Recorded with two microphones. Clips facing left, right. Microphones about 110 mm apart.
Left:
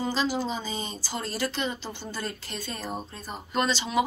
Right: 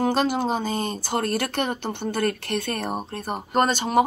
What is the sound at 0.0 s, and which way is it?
Speech, 55° right (ahead or behind).